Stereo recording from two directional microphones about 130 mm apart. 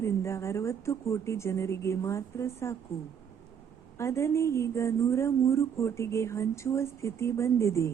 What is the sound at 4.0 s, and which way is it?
A woman's voice, 20° left (ahead or behind).